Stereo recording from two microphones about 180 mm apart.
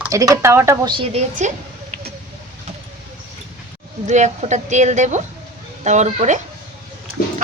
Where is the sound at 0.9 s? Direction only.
40° right (ahead or behind).